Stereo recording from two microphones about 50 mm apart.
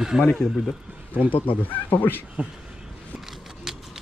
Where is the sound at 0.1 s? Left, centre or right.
Centre.